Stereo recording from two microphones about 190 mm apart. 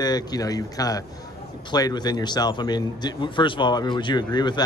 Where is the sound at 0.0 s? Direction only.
20° left (ahead or behind).